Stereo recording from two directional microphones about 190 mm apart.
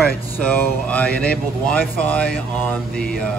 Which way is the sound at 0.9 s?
5° left (ahead or behind).